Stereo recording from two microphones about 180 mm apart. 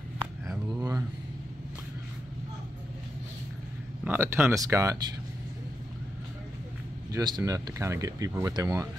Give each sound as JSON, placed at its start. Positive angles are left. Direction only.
{"t": 0.7, "sound": "a sound", "side_deg": -20}
{"t": 4.0, "sound": "speech", "side_deg": -10}
{"t": 7.1, "sound": "speech", "side_deg": -20}